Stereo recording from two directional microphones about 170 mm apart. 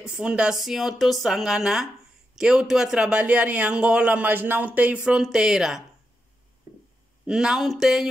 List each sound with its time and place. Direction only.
0.0 s speech: 5° right (ahead or behind)
7.2 s speech: 5° right (ahead or behind)